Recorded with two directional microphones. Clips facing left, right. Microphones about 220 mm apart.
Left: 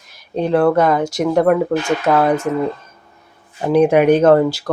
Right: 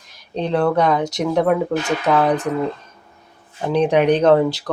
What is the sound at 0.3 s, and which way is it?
Speech, 5° left (ahead or behind).